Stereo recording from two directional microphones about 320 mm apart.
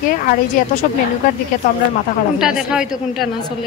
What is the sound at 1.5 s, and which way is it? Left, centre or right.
Speech, left.